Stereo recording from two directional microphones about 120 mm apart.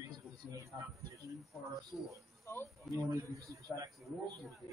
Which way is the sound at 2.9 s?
25° right (ahead or behind).